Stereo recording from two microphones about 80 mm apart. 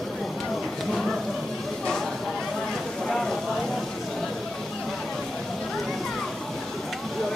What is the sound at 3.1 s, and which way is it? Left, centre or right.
Clip-clop, centre.